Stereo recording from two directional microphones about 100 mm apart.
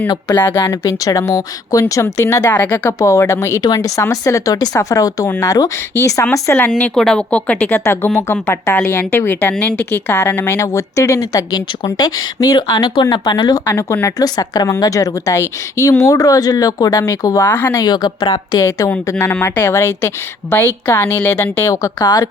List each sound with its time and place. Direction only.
0.3 s a woman's voice: 20° left (ahead or behind)
2.6 s speech: 15° left (ahead or behind)
3.0 s a woman's voice: 30° left (ahead or behind)
6.9 s speech: 5° left (ahead or behind)
7.9 s speech: 25° left (ahead or behind)
14.3 s a woman's voice: 40° left (ahead or behind); by 17.7 s 20° left (ahead or behind)
17.7 s a woman's voice: 45° left (ahead or behind)
19.3 s speech: 25° left (ahead or behind)